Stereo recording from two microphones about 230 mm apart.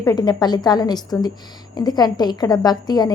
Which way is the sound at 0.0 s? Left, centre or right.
Centre.